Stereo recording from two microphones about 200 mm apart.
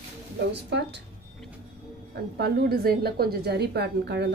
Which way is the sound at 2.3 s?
50° right (ahead or behind).